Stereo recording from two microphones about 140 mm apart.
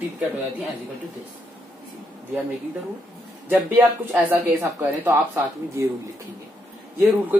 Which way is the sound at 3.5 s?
15° right (ahead or behind).